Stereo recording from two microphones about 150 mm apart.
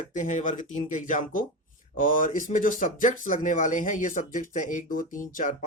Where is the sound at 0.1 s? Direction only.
55° left (ahead or behind).